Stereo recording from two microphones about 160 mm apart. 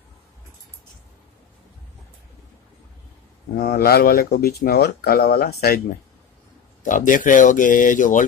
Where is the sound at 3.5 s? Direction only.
70° left (ahead or behind).